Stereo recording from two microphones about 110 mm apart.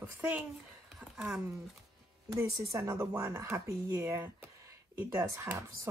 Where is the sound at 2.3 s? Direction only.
30° right (ahead or behind).